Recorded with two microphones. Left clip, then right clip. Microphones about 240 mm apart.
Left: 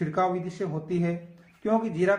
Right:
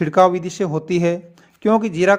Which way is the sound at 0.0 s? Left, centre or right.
Right.